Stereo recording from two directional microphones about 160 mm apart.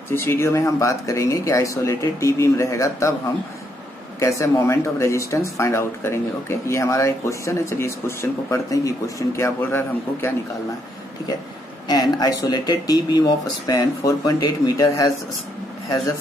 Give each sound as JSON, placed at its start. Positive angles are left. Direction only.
{"t": 0.1, "sound": "speech", "side_deg": 15}
{"t": 4.2, "sound": "speech", "side_deg": 20}
{"t": 11.9, "sound": "speech", "side_deg": 25}